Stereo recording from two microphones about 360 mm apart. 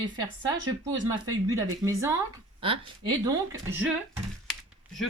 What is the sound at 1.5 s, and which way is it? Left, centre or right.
Speech, centre.